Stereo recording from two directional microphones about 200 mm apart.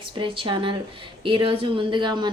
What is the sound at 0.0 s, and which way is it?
A woman's voice, 25° right (ahead or behind).